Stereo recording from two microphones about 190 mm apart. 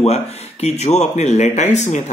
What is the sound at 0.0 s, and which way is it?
Speech, 35° left (ahead or behind).